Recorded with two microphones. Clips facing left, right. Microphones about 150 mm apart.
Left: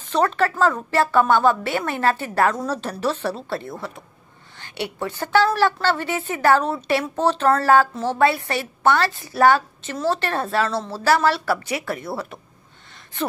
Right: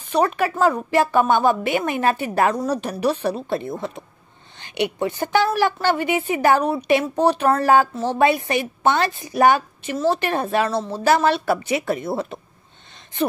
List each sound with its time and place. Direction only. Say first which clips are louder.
0.1 s a woman's voice: even; 10° right (ahead or behind)